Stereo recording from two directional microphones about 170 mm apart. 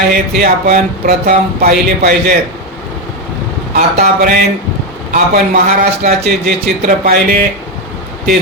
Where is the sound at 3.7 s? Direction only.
60° right (ahead or behind).